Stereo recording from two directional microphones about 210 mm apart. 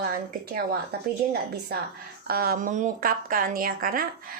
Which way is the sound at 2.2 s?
45° right (ahead or behind).